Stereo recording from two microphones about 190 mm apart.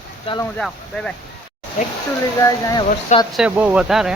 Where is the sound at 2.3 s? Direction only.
20° left (ahead or behind).